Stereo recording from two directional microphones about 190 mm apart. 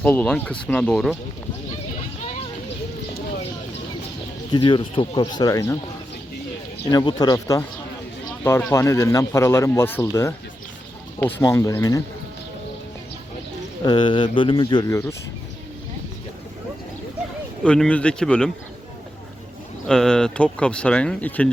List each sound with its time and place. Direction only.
0.0 s speech: 10° left (ahead or behind)
4.5 s speech: 25° left (ahead or behind)
6.9 s speech: 20° left (ahead or behind)
13.8 s speech: 25° left (ahead or behind)
17.6 s speech: 5° left (ahead or behind)
19.9 s speech: 5° left (ahead or behind)